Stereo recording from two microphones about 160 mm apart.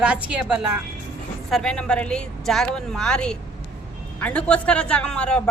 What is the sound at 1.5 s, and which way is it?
A woman's voice, 5° left (ahead or behind).